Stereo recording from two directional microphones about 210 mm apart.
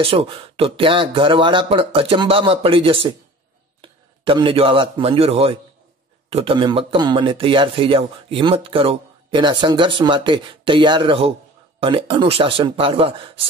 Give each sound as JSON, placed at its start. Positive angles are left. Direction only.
{"t": 0.0, "sound": "a man's voice", "side_deg": -25}